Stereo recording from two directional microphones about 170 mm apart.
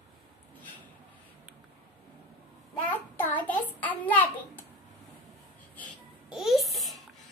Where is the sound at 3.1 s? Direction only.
10° left (ahead or behind).